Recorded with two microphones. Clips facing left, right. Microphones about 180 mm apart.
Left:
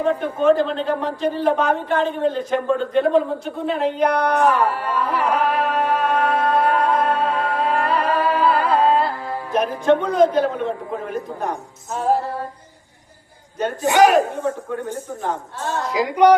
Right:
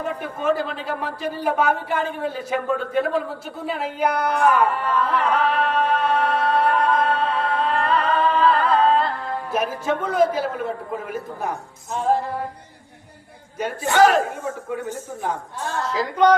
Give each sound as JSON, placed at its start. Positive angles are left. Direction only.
{"t": 0.1, "sound": "a man's voice", "side_deg": -10}
{"t": 4.9, "sound": "music", "side_deg": 10}
{"t": 9.5, "sound": "a man's voice", "side_deg": -5}
{"t": 13.8, "sound": "a woman's voice", "side_deg": 15}
{"t": 15.7, "sound": "a woman's voice", "side_deg": 15}